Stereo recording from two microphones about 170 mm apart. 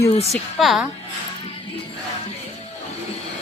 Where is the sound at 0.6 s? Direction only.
Centre (ahead or behind).